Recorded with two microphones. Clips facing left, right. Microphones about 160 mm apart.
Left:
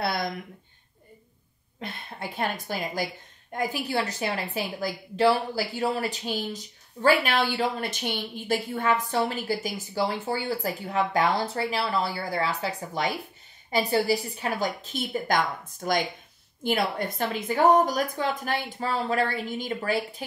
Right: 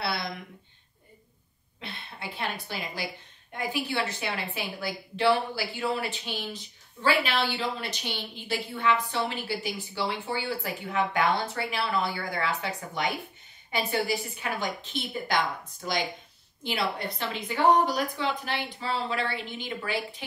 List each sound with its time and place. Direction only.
0.0 s speech: 45° left (ahead or behind)
1.8 s a woman's voice: 45° left (ahead or behind)